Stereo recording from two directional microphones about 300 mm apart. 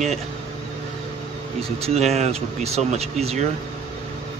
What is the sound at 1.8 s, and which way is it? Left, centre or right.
Speech, right.